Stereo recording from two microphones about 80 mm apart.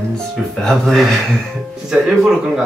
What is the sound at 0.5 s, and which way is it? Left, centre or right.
Speech, centre.